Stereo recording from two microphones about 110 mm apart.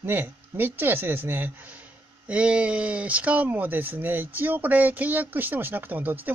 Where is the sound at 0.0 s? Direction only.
20° right (ahead or behind).